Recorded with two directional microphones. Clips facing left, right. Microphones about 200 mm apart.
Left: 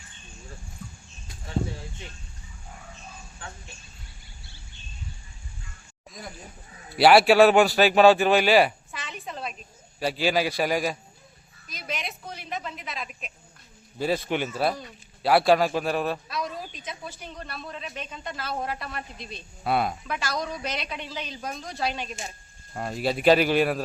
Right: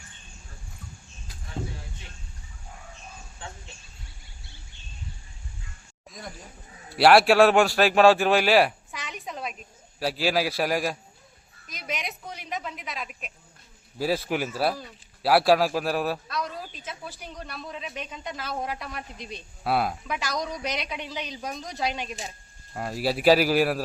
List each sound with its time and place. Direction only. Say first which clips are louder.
3.4 s speech: right 1 dB; 25° right (ahead or behind)
6.1 s a sound: even; centre (ahead or behind)
6.9 s speech: left 1 dB; centre (ahead or behind)
9.0 s a sound: right 1 dB; 15° right (ahead or behind)
10.0 s speech: left 1 dB; centre (ahead or behind)
11.7 s a man's voice: even; 15° right (ahead or behind)
19.6 s speech: even; centre (ahead or behind)
20.1 s a man's voice: even; 15° right (ahead or behind)
22.7 s speech: even; 5° right (ahead or behind)